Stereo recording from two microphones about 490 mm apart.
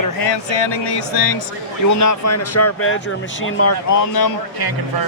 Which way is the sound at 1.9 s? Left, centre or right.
Left.